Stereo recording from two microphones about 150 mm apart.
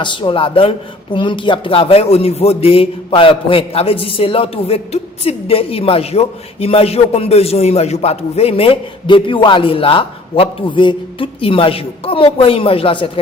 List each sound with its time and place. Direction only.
0.0 s a man's voice: 35° left (ahead or behind)